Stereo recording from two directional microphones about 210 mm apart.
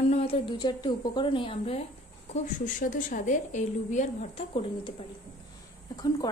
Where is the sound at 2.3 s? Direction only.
40° left (ahead or behind).